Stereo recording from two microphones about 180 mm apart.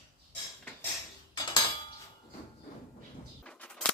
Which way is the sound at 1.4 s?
25° left (ahead or behind).